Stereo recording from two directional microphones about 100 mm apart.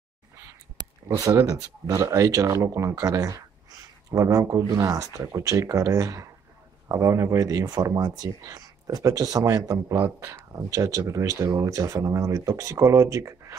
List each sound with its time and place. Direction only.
1.0 s speech: 35° right (ahead or behind)